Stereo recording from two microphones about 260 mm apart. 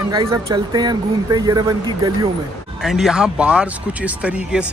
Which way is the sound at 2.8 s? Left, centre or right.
Centre.